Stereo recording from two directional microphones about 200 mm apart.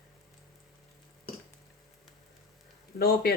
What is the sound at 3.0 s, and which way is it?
Speech, 50° left (ahead or behind).